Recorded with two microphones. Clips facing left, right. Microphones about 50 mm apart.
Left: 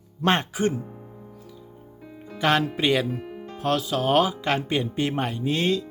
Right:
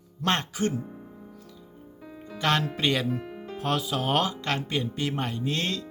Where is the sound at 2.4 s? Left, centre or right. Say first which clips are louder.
Left 4 dB; centre.